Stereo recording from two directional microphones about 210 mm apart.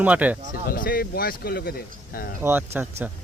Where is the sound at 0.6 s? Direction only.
45° left (ahead or behind).